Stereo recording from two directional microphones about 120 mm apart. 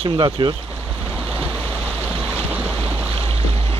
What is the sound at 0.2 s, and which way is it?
Speech, 40° right (ahead or behind).